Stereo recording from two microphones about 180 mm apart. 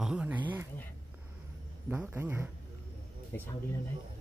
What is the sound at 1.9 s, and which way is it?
Speech, 10° right (ahead or behind).